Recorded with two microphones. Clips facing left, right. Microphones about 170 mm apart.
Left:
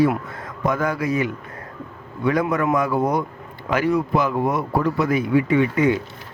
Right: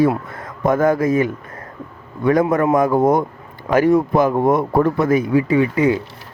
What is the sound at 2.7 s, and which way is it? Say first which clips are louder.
Speech: right 6 dB; 45° right (ahead or behind).